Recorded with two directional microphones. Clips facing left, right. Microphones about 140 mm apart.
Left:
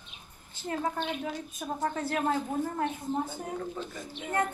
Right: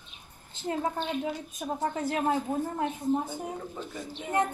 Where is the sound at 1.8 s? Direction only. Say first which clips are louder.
Right 1 dB; 20° right (ahead or behind).